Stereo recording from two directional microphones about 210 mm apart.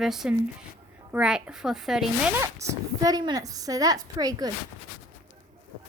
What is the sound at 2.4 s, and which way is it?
A woman's voice, 15° right (ahead or behind).